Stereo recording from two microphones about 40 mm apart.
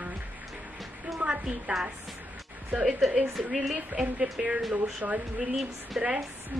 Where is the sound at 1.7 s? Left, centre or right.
Right.